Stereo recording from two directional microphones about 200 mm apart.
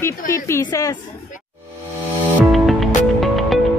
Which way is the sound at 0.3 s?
15° left (ahead or behind).